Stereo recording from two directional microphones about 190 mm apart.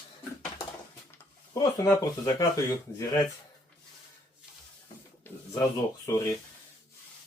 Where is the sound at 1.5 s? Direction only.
15° left (ahead or behind).